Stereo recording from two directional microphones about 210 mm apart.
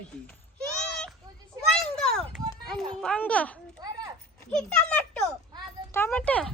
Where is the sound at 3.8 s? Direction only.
20° right (ahead or behind).